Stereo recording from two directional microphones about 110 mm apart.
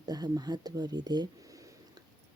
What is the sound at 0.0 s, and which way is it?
A woman's voice, 40° right (ahead or behind).